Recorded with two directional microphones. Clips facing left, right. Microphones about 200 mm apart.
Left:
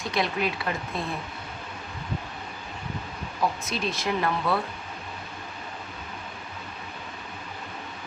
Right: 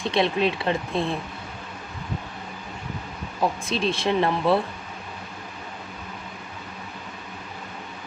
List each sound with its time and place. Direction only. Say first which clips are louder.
0.0 s speech: right 5 dB; 25° right (ahead or behind)
3.6 s speech: right 5 dB; 30° right (ahead or behind)